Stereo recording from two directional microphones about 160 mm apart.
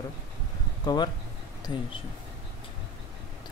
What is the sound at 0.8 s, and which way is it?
Speech, 25° left (ahead or behind).